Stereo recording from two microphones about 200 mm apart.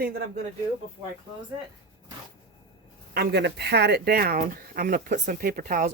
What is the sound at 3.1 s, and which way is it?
Speech, 55° right (ahead or behind).